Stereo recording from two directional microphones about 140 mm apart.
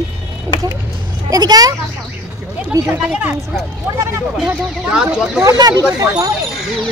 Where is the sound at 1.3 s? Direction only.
30° right (ahead or behind).